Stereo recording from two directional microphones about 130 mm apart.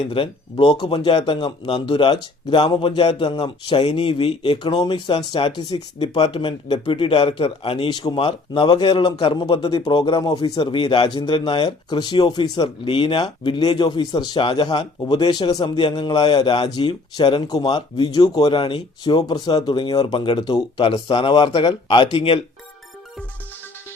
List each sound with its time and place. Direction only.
0.0 s speech: 45° left (ahead or behind)